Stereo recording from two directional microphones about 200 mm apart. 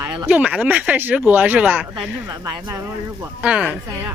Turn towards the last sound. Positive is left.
turn(degrees=-5)  # may be behind; listen again after turning